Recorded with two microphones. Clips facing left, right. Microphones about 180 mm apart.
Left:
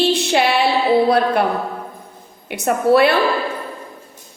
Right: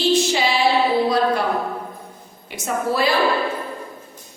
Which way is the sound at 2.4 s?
60° left (ahead or behind).